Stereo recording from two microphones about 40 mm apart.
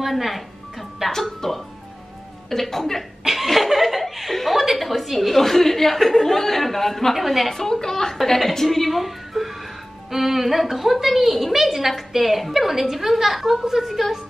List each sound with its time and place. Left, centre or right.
0.0 s speech: centre
7.5 s a woman's voice: centre